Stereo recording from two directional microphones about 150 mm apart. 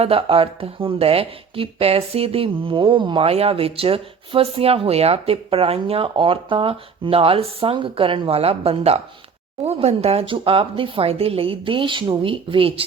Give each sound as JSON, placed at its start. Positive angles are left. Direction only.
{"t": 0.0, "sound": "speech", "side_deg": -40}